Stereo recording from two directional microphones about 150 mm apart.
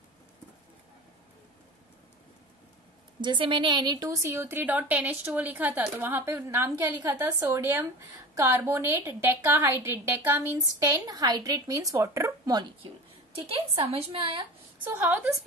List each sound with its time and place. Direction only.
3.2 s a woman's voice: 35° right (ahead or behind)
13.5 s a woman's voice: 40° right (ahead or behind)
14.8 s a woman's voice: 15° right (ahead or behind)